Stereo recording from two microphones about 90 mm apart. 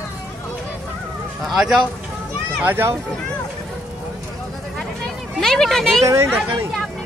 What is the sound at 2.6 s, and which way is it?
Speech, 25° right (ahead or behind).